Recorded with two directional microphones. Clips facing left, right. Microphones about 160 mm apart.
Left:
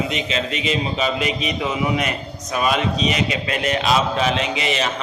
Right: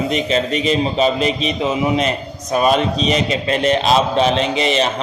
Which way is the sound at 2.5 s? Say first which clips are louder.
Right 5 dB; 35° right (ahead or behind).